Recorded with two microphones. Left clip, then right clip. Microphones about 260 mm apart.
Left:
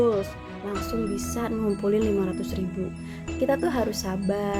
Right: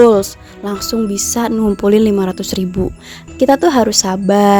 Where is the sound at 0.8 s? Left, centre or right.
Right.